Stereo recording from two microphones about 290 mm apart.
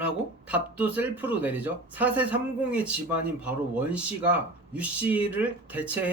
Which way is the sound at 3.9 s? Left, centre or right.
Centre.